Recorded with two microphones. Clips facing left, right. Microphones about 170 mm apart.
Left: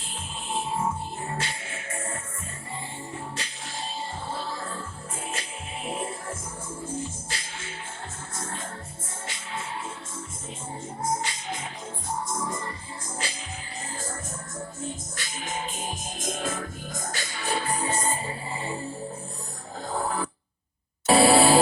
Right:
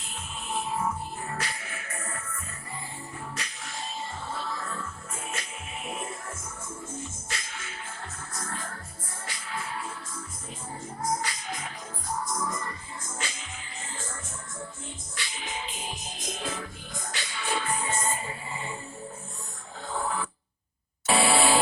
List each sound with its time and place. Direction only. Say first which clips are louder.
0.5 s music: left 2 dB; 25° left (ahead or behind)
11.0 s music: left 1 dB; 25° left (ahead or behind)
15.1 s music: left 3 dB; 45° left (ahead or behind)
19.9 s a sound: left 2 dB; 40° left (ahead or behind)